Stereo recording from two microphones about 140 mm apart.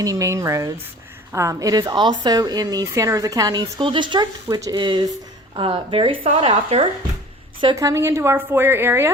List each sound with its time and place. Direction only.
0.0 s a woman's voice: 25° right (ahead or behind); by 6.8 s 45° right (ahead or behind)
7.6 s speech: 35° right (ahead or behind)
7.9 s a woman's voice: 20° right (ahead or behind)